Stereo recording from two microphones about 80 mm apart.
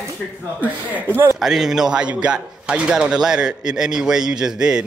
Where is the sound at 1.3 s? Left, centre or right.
Centre.